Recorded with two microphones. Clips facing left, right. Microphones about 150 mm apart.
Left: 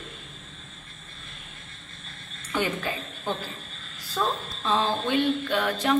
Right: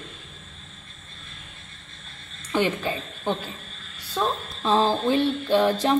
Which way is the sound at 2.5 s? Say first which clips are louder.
Right 4 dB; 25° right (ahead or behind).